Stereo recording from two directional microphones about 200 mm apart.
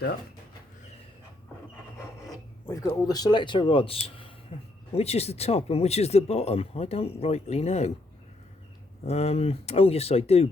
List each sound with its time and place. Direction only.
2.6 s speech: 15° left (ahead or behind); by 7.9 s 30° left (ahead or behind)
9.0 s speech: 30° left (ahead or behind)